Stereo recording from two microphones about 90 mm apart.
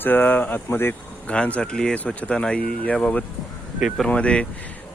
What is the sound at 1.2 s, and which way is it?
Speech, 15° left (ahead or behind).